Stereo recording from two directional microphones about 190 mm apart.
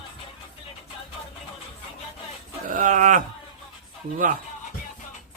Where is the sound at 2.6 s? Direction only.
40° right (ahead or behind).